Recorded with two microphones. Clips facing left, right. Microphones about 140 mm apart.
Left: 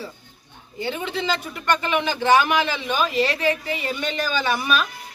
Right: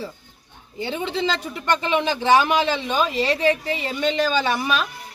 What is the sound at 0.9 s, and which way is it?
A woman's voice, 25° right (ahead or behind).